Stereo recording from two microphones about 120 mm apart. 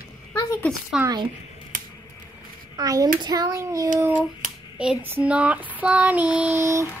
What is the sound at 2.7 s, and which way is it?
A child's voice, 30° right (ahead or behind).